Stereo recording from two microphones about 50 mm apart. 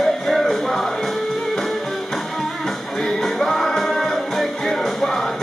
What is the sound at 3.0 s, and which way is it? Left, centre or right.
Music, centre.